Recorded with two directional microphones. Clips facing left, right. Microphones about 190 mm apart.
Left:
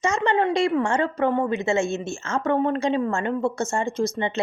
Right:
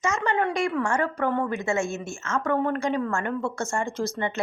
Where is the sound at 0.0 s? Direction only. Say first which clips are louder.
Left 3 dB; 30° left (ahead or behind).